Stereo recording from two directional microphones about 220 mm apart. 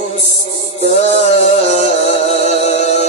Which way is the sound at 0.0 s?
30° left (ahead or behind).